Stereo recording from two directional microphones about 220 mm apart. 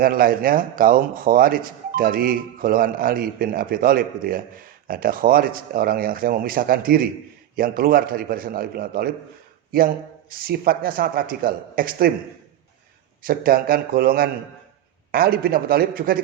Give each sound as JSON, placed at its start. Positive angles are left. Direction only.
{"t": 0.0, "sound": "speech", "side_deg": -40}
{"t": 13.2, "sound": "speech", "side_deg": -40}